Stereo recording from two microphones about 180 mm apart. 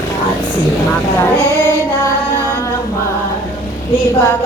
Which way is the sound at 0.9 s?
10° left (ahead or behind).